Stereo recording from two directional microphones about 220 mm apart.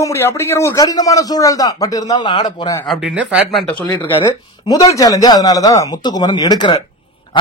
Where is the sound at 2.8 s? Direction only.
Centre (ahead or behind).